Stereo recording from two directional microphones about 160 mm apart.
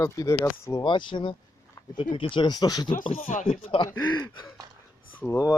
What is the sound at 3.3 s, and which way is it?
Speech, 55° left (ahead or behind).